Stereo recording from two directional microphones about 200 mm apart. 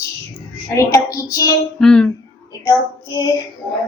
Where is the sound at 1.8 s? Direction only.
5° left (ahead or behind).